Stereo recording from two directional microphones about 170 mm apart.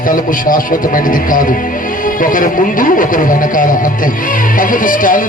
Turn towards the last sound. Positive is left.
turn(degrees=55)  # may be behind; listen again after turning